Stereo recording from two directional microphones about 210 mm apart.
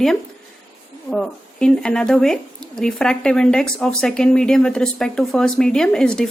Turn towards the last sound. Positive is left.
turn(degrees=5)  # may be behind; listen again after turning